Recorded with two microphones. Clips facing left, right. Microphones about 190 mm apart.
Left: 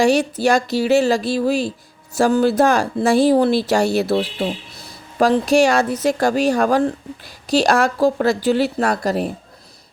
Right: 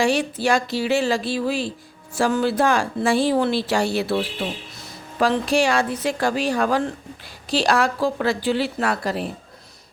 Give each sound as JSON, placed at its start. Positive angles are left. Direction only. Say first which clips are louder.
{"t": 0.0, "sound": "speech", "louder": "left 5 dB", "side_deg": 40}